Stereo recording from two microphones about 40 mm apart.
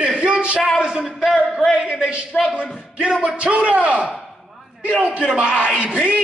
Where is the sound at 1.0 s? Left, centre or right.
Centre.